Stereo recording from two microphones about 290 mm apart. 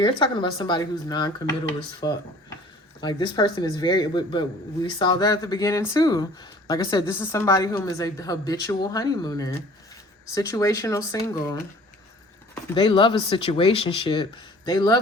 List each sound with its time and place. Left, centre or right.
0.0 s speech: centre
12.7 s speech: centre